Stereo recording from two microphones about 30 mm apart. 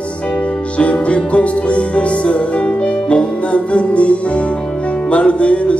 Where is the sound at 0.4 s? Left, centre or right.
Left.